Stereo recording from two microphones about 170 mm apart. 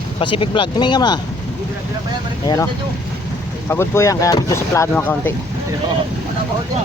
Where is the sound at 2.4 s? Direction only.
20° left (ahead or behind).